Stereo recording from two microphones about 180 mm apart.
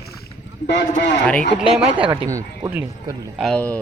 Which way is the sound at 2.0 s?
30° right (ahead or behind).